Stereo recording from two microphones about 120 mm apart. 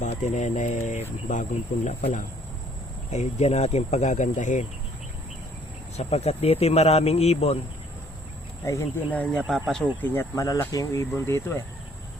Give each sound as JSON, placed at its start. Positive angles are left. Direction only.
{"t": 0.0, "sound": "speech", "side_deg": 90}
{"t": 6.0, "sound": "speech", "side_deg": 60}
{"t": 8.6, "sound": "speech", "side_deg": 25}
{"t": 9.1, "sound": "speech", "side_deg": 10}
{"t": 10.3, "sound": "speech", "side_deg": 30}